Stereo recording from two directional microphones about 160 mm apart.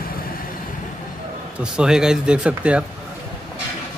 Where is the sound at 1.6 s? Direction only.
5° right (ahead or behind).